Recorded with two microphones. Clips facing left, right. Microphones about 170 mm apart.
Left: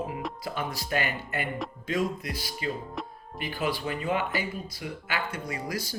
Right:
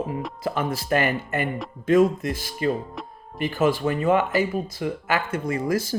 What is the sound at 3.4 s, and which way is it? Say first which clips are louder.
Speech: right 9 dB; 45° right (ahead or behind).